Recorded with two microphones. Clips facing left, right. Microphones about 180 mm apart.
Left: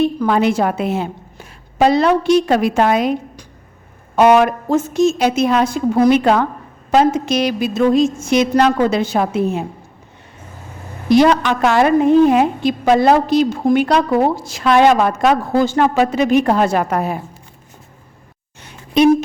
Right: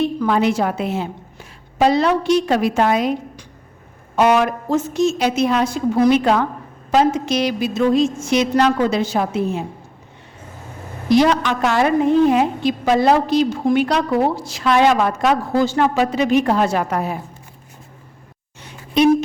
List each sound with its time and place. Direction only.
0.2 s a woman's voice: 55° left (ahead or behind)
4.1 s a woman's voice: 55° left (ahead or behind)
11.1 s a woman's voice: 55° left (ahead or behind)